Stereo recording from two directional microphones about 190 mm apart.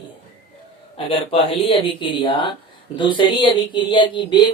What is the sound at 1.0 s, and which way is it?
Speech, 30° left (ahead or behind).